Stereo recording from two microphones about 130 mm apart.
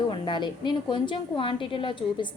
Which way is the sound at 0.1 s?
35° left (ahead or behind).